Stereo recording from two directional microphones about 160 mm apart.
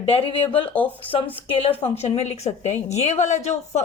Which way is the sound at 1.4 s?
40° left (ahead or behind).